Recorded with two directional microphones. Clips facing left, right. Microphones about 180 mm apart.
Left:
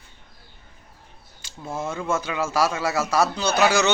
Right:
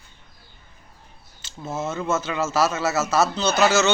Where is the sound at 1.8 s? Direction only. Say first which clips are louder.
Right 1 dB; 10° left (ahead or behind).